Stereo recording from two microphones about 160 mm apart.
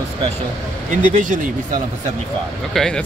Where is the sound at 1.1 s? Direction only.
55° right (ahead or behind).